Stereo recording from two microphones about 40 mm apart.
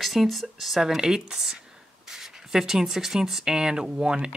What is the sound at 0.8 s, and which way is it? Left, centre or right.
Speech, centre.